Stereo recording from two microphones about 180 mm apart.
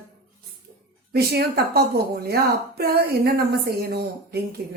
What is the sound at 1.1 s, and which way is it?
Speech, 60° right (ahead or behind).